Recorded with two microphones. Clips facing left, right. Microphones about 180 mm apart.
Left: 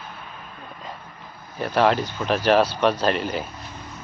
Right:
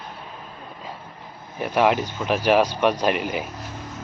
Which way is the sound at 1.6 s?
10° right (ahead or behind).